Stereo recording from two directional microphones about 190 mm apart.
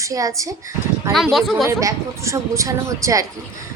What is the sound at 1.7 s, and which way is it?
A woman's voice, 15° right (ahead or behind).